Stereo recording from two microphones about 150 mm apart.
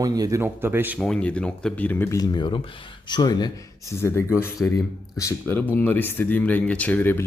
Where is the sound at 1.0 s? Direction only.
5° left (ahead or behind); by 3.5 s 30° left (ahead or behind).